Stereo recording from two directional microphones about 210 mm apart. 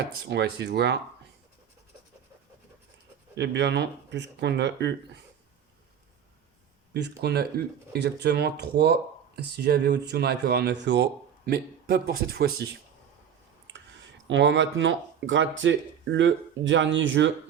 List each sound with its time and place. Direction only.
0.3 s speech: 55° right (ahead or behind)
3.3 s speech: 55° right (ahead or behind)
7.2 s speech: 50° right (ahead or behind)
14.3 s speech: 60° right (ahead or behind)